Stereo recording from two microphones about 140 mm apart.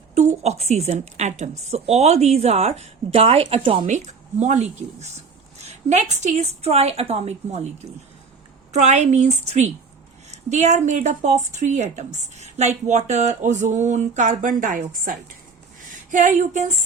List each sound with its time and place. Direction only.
0.1 s a woman's voice: 50° right (ahead or behind)
3.8 s a woman's voice: 55° right (ahead or behind); by 15.1 s 70° right (ahead or behind)
16.1 s speech: 65° right (ahead or behind)